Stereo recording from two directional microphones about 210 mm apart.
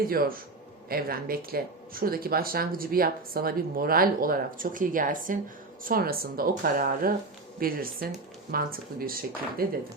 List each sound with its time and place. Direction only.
0.1 s speech: 45° right (ahead or behind)